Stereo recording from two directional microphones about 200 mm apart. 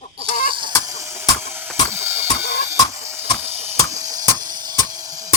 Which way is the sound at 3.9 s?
15° right (ahead or behind).